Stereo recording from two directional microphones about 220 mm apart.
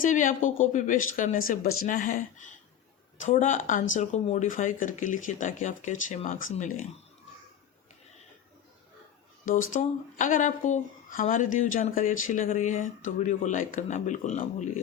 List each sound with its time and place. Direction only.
0.0 s speech: 35° left (ahead or behind)
9.5 s speech: 35° left (ahead or behind)